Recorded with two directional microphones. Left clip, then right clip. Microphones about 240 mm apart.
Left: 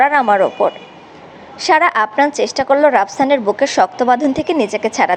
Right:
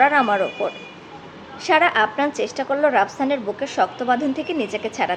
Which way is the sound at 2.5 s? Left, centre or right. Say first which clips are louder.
Left 8 dB; centre.